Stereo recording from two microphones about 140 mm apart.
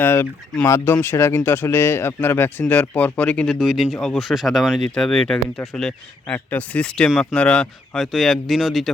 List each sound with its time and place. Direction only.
0.0 s speech: 15° left (ahead or behind); by 8.9 s centre (ahead or behind)